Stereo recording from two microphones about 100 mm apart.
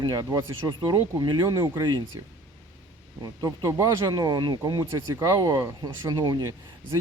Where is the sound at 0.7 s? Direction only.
45° right (ahead or behind).